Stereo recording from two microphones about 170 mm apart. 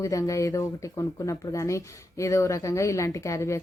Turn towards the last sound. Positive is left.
turn(degrees=15)  # may be behind; listen again after turning